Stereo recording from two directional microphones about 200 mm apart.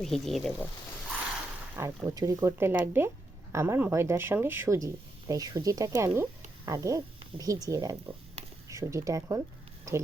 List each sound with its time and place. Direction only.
0.0 s speech: centre (ahead or behind)
1.7 s speech: 15° right (ahead or behind)